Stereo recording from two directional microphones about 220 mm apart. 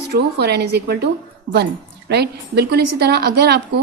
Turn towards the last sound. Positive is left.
turn(degrees=-45)  # may be behind; listen again after turning